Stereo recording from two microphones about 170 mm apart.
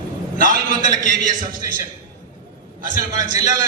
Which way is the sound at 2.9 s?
20° right (ahead or behind).